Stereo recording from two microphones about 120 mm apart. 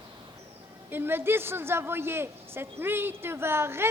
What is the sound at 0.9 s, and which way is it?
A man's voice, 20° right (ahead or behind).